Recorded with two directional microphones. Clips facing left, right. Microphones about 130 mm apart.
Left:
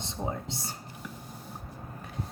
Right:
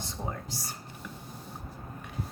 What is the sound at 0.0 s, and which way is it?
Speech, 25° left (ahead or behind).